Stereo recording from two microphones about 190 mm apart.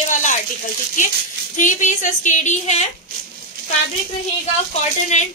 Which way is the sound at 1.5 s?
40° left (ahead or behind).